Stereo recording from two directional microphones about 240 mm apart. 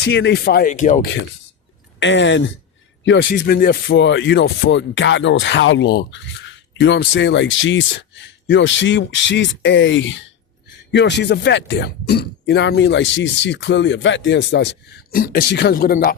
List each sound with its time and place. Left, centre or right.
0.1 s speech: left
2.0 s speech: left